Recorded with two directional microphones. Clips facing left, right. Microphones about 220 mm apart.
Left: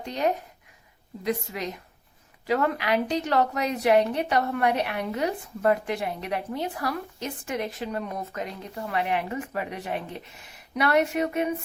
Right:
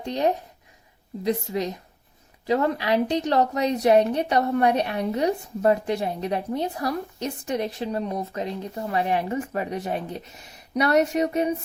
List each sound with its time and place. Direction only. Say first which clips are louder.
0.0 s a woman's voice: right 3 dB; 30° right (ahead or behind)